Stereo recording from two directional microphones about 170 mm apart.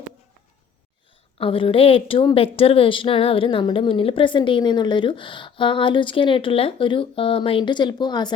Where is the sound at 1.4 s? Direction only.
30° left (ahead or behind).